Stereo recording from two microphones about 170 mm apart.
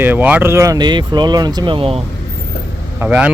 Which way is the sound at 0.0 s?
10° right (ahead or behind).